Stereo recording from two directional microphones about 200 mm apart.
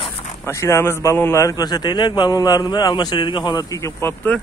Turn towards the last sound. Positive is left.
turn(degrees=10)  # may be behind; listen again after turning